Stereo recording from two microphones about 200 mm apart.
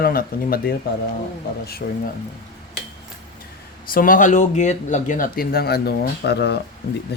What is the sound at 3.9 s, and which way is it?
Speech, 45° left (ahead or behind).